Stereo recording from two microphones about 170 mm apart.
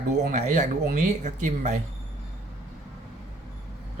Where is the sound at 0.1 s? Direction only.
45° right (ahead or behind).